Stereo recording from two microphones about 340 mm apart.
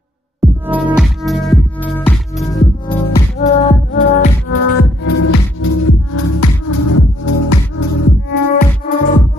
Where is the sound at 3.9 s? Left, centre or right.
Left.